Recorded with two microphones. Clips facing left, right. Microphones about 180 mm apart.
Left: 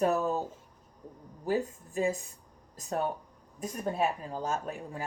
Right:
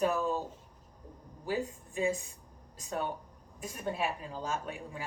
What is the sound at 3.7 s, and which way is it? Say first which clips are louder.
A woman's voice: left 4 dB; 40° left (ahead or behind).